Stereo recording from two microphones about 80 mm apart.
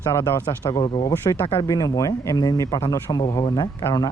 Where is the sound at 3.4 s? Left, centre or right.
Left.